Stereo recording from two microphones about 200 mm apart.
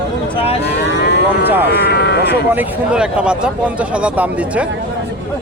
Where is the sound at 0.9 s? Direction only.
60° left (ahead or behind).